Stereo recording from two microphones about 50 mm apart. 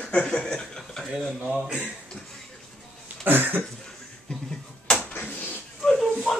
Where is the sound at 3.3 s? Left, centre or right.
Right.